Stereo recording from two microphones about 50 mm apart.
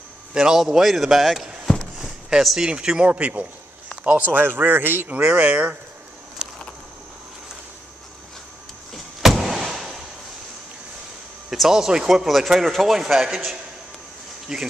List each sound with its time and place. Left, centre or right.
0.3 s a man's voice: centre
2.0 s a sound: centre
2.4 s a man's voice: centre; by 5.2 s right
5.2 s speech: right
8.9 s vehicle: centre
11.5 s speech: centre
14.5 s speech: centre